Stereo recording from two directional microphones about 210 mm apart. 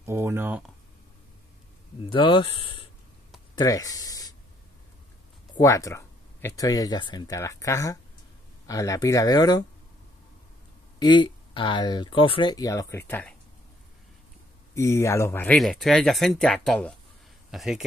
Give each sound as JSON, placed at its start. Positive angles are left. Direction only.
{"t": 0.0, "sound": "speech", "side_deg": -10}
{"t": 2.0, "sound": "speech", "side_deg": 25}
{"t": 3.5, "sound": "a sound", "side_deg": 15}
{"t": 5.6, "sound": "speech", "side_deg": 15}
{"t": 11.0, "sound": "speech", "side_deg": 20}
{"t": 14.7, "sound": "speech", "side_deg": 15}